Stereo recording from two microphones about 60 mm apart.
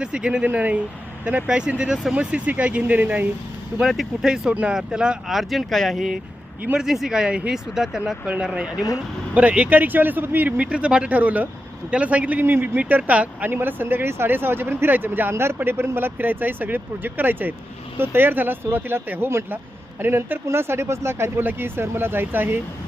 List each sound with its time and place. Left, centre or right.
0.0 s speech: centre
3.8 s speech: centre
4.7 s speech: centre
5.3 s speech: centre
8.5 s speech: centre
10.6 s speech: right
13.5 s speech: right